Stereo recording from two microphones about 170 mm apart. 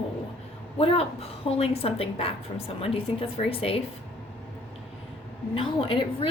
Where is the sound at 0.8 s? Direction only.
35° left (ahead or behind).